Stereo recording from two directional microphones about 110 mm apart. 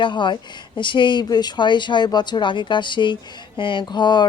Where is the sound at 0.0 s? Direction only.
45° left (ahead or behind).